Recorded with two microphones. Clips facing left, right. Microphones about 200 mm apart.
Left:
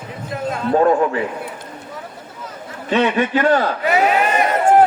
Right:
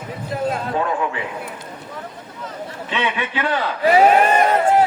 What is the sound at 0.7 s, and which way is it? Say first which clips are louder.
Speech: left 7 dB; 40° left (ahead or behind).